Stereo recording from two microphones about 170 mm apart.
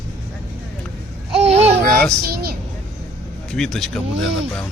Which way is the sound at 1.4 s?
40° right (ahead or behind).